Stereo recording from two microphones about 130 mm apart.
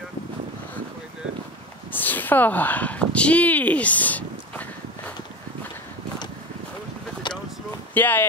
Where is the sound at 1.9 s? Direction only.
15° left (ahead or behind).